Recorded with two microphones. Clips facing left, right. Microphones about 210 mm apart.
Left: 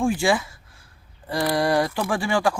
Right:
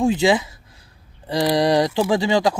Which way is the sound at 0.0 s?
20° right (ahead or behind).